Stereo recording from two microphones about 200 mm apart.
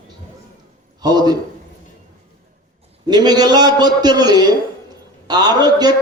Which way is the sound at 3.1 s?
20° right (ahead or behind).